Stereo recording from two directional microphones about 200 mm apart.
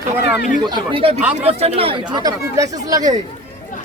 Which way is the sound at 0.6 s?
20° right (ahead or behind).